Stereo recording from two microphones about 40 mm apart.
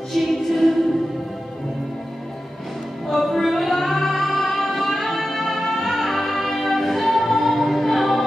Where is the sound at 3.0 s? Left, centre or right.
Centre.